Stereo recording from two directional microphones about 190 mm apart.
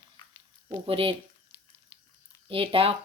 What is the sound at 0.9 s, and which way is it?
Speech, 30° right (ahead or behind).